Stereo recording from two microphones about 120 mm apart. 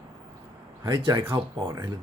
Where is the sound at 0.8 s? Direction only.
40° right (ahead or behind).